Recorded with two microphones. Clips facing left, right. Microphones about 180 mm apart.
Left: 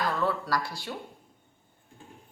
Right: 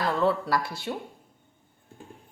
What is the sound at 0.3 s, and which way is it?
Speech, 25° right (ahead or behind).